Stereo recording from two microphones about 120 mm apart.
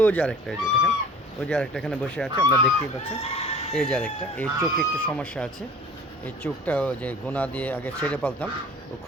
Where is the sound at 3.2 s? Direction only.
55° left (ahead or behind).